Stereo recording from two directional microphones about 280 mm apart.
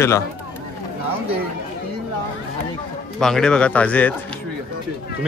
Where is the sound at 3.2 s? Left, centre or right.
Centre.